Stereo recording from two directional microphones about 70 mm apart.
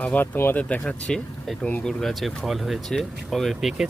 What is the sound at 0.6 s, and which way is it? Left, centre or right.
Speech, centre.